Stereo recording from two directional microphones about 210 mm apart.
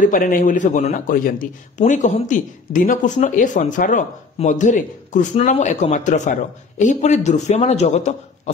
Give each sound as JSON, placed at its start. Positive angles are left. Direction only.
{"t": 0.0, "sound": "speech", "side_deg": 40}